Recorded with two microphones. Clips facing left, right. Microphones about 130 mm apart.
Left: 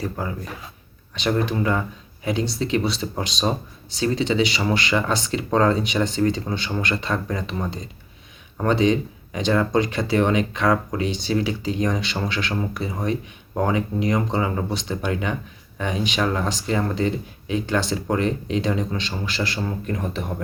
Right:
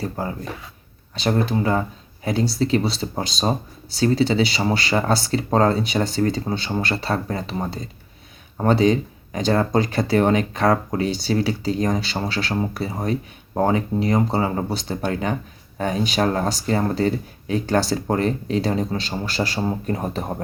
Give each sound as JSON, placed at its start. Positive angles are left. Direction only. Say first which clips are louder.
{"t": 0.0, "sound": "speech", "louder": "right 1 dB", "side_deg": -30}